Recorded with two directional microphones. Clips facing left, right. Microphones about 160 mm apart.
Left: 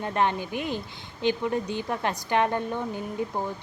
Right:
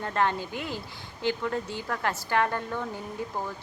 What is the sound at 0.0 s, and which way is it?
A woman's voice, 20° left (ahead or behind).